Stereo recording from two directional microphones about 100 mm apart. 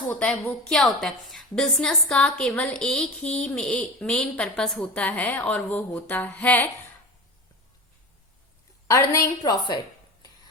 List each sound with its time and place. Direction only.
0.1 s a woman's voice: 10° left (ahead or behind)
8.9 s a woman's voice: 30° left (ahead or behind)
9.4 s a woman's voice: 40° left (ahead or behind)